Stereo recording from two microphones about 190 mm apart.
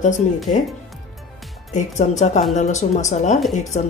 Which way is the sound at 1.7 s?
40° left (ahead or behind).